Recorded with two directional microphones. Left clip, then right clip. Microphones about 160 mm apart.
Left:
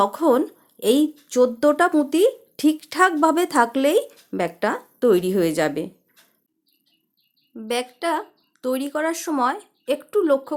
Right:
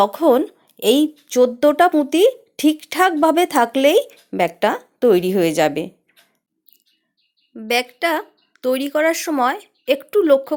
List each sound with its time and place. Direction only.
0.0 s a woman's voice: 15° right (ahead or behind)
7.5 s speech: 20° right (ahead or behind)